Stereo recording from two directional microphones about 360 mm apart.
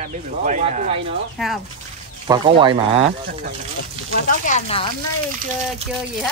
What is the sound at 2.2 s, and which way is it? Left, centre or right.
Speech, centre.